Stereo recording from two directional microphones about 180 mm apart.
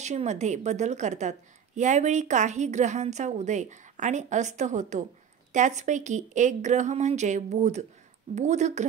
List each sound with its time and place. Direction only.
0.0 s a woman's voice: 40° right (ahead or behind)